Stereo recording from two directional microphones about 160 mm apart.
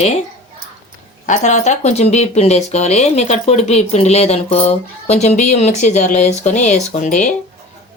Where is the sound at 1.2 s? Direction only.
50° left (ahead or behind).